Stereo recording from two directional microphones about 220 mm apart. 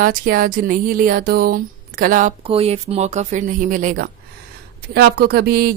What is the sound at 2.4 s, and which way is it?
Speech, 25° right (ahead or behind).